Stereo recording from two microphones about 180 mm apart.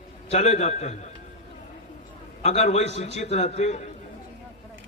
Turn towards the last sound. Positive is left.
turn(degrees=40)  # may be behind; listen again after turning